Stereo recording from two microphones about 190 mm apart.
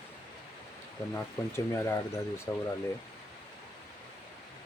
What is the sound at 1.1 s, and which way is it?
Speech, 15° left (ahead or behind).